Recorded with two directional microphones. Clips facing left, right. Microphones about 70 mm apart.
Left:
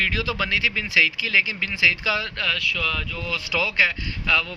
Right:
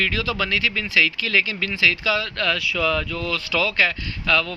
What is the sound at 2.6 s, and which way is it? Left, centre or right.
Speech, centre.